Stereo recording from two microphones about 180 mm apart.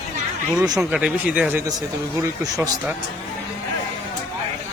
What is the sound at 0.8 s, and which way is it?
Speech, 5° right (ahead or behind).